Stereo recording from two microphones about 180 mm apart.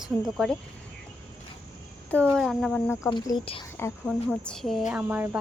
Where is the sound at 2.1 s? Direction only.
5° left (ahead or behind).